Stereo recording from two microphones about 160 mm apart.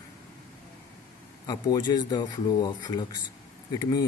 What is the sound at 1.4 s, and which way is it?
Speech, 25° left (ahead or behind).